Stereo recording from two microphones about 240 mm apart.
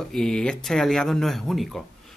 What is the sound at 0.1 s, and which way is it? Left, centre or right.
Speech, centre.